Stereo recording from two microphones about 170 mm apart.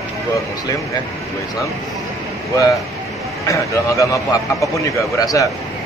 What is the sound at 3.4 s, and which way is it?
A man's voice, 20° left (ahead or behind).